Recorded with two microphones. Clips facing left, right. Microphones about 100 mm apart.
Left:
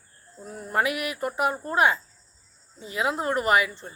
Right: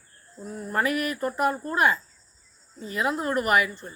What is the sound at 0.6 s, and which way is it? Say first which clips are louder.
Speech: even; 20° left (ahead or behind).